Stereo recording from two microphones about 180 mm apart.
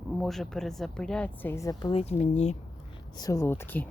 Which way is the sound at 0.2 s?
Centre (ahead or behind).